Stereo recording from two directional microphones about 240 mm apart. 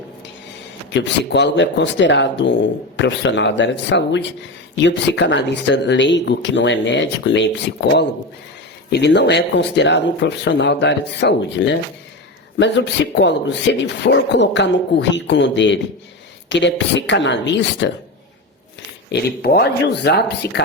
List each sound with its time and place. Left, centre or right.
0.9 s speech: left
13.1 s speech: left
19.1 s speech: left